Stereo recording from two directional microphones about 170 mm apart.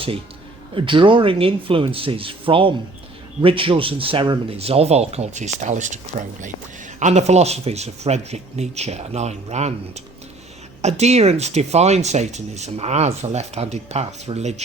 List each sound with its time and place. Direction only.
0.7 s speech: 30° right (ahead or behind)